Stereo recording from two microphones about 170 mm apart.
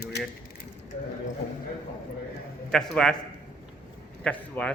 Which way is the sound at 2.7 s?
5° left (ahead or behind).